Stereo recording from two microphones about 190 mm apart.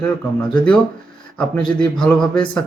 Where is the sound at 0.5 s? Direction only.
5° left (ahead or behind).